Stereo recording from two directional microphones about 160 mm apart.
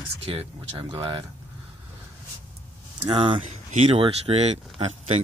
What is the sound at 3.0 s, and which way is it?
Speech, 30° right (ahead or behind).